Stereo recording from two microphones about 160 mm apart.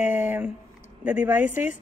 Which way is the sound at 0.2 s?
10° right (ahead or behind).